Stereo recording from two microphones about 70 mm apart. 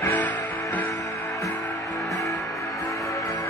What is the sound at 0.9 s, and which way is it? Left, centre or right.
Music, left.